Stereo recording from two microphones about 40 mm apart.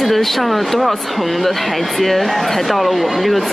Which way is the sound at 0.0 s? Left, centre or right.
Centre.